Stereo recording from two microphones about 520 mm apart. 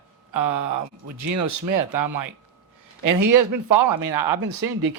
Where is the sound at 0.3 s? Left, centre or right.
Right.